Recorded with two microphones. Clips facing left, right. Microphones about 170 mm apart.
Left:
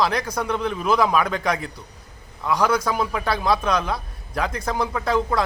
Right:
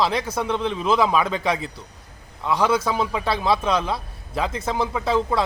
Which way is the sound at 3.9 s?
25° right (ahead or behind).